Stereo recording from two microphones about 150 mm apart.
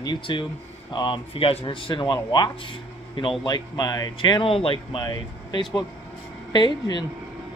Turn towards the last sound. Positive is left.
turn(degrees=30)  # may be behind; listen again after turning